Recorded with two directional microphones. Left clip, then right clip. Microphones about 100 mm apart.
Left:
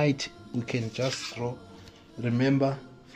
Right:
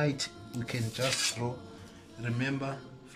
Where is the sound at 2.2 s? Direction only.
70° left (ahead or behind).